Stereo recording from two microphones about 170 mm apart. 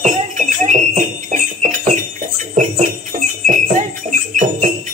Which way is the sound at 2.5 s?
45° right (ahead or behind).